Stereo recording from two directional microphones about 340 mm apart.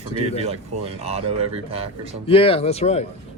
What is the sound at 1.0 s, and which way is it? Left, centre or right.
Speech, centre.